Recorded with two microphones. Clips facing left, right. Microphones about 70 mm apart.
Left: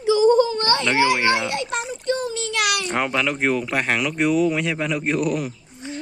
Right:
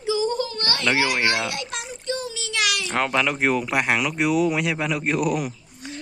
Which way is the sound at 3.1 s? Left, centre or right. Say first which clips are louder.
Right 1 dB; centre.